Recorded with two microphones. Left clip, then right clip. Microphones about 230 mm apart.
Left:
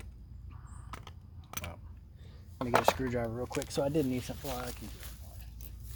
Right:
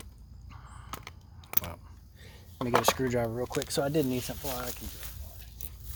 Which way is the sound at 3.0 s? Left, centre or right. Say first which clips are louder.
Right 5 dB; right.